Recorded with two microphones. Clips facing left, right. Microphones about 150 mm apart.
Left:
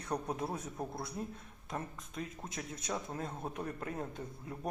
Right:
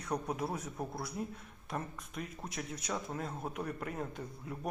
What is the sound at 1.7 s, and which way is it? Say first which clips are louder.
Speech: right 1 dB; 25° left (ahead or behind).